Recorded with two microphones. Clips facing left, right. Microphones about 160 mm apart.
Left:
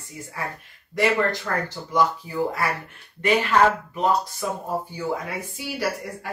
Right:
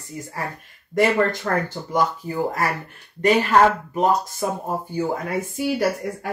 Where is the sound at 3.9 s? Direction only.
45° right (ahead or behind).